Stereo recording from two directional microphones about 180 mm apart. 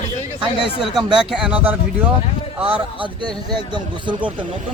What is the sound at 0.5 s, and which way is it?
Speech, 30° left (ahead or behind).